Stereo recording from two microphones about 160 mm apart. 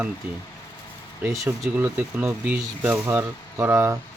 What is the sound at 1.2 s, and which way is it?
Speech, 20° right (ahead or behind).